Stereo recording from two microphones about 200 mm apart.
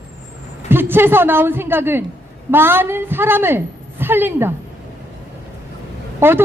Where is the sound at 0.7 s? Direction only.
10° right (ahead or behind).